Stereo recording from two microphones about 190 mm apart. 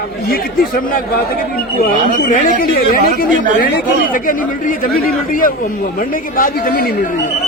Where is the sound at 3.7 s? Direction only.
45° left (ahead or behind).